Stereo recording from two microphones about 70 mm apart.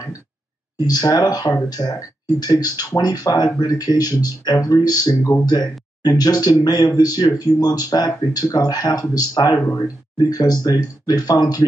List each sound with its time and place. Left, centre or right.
0.7 s speech: left
5.1 s speech: left
5.4 s speech: left